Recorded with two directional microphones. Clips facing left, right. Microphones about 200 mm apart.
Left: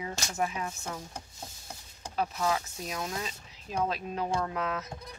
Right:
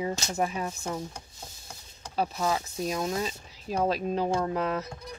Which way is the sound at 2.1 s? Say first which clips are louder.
Right 2 dB; 35° right (ahead or behind).